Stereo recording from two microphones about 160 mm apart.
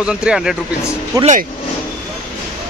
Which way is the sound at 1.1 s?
20° right (ahead or behind).